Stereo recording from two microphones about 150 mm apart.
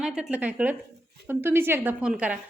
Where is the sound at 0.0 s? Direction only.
5° right (ahead or behind).